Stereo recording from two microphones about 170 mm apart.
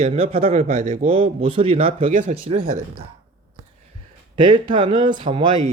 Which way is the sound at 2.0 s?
50° right (ahead or behind).